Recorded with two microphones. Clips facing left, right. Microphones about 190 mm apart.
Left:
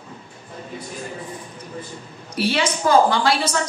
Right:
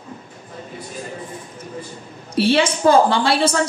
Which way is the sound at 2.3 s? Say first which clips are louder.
Right 5 dB; 30° right (ahead or behind).